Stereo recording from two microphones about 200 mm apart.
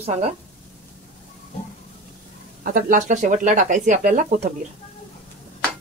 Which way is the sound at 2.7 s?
40° right (ahead or behind).